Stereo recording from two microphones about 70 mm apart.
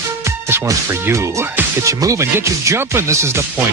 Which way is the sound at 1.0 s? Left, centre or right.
Right.